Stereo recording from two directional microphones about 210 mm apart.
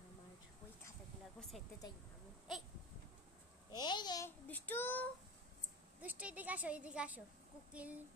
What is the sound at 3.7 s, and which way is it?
Speech, 20° left (ahead or behind).